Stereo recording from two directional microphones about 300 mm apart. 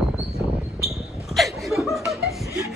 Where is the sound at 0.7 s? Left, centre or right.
Centre.